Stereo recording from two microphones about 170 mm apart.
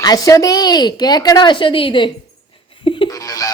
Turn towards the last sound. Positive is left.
turn(degrees=20)  # may be behind; listen again after turning